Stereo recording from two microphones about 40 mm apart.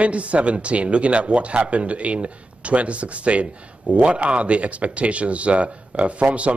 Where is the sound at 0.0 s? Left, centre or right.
Right.